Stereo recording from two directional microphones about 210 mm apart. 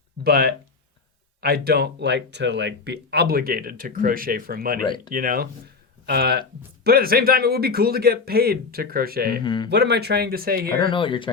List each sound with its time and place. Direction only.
0.3 s speech: 45° right (ahead or behind)
9.4 s speech: 20° left (ahead or behind)
9.6 s speech: 50° right (ahead or behind)
10.8 s speech: 25° left (ahead or behind)